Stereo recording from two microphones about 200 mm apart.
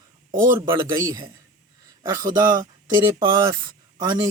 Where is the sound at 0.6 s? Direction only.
20° right (ahead or behind).